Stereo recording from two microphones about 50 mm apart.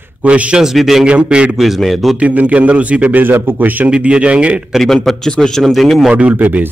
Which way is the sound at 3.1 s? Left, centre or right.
Right.